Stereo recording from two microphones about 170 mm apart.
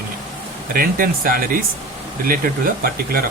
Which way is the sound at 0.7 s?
60° right (ahead or behind).